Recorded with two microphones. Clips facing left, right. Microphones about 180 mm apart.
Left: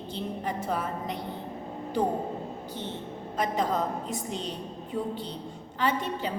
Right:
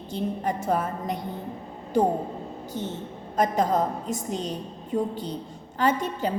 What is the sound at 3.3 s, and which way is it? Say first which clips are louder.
A woman's voice: right 5 dB; 45° right (ahead or behind).